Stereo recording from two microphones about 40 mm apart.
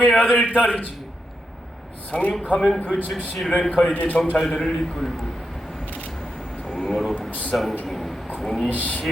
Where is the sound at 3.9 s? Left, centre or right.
Left.